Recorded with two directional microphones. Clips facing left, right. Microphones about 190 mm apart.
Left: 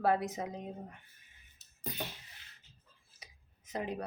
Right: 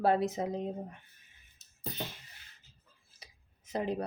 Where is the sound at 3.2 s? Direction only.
30° right (ahead or behind).